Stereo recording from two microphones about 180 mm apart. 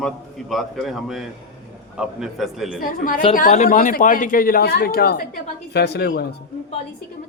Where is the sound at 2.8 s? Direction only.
50° left (ahead or behind).